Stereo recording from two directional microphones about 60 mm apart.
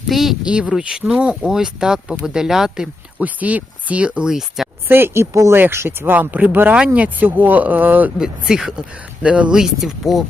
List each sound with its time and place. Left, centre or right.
0.1 s speech: centre
0.4 s speech: centre
3.2 s speech: right
4.3 s speech: centre
4.9 s speech: right
5.5 s speech: right
5.8 s speech: right
6.1 s speech: right
8.2 s speech: centre
9.2 s speech: right
9.6 s speech: centre